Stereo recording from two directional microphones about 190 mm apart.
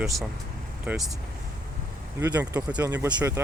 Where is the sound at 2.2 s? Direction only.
20° right (ahead or behind).